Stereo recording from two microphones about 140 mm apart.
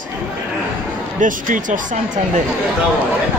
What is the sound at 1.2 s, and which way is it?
Speech, 70° right (ahead or behind).